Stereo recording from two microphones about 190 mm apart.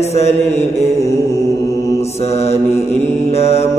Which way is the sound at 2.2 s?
35° left (ahead or behind).